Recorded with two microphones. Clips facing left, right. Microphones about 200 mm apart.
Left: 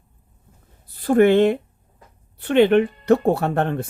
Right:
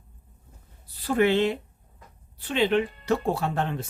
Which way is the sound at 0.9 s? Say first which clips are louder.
Left 8 dB; 50° left (ahead or behind).